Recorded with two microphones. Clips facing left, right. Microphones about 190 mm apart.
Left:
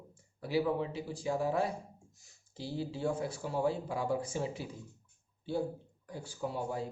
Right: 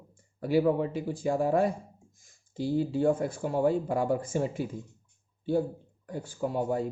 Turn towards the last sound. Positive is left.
turn(degrees=-50)  # may be behind; listen again after turning